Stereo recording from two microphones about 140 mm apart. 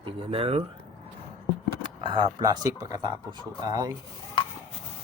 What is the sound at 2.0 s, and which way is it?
Speech, 40° right (ahead or behind).